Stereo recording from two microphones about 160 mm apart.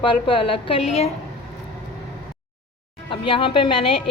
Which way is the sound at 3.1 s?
30° left (ahead or behind).